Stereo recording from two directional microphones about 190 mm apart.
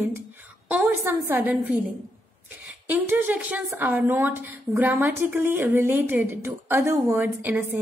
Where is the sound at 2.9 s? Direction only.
10° right (ahead or behind).